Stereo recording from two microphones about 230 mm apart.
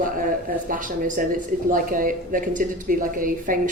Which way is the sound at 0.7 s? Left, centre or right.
Right.